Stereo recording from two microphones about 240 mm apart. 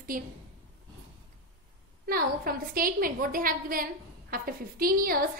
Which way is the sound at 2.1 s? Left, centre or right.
Right.